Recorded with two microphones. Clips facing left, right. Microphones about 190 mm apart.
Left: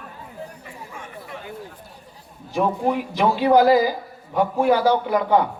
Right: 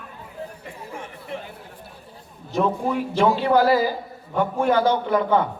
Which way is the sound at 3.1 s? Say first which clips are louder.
Left 1 dB; 15° left (ahead or behind).